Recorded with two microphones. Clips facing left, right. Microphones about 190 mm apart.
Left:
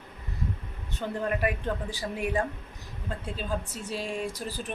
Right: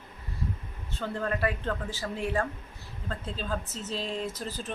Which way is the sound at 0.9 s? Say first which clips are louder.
Left 1 dB; 15° left (ahead or behind).